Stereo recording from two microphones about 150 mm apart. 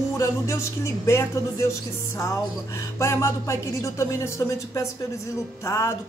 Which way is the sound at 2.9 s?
20° left (ahead or behind).